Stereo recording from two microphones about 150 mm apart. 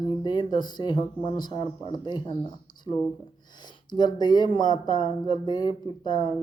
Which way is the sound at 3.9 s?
30° left (ahead or behind).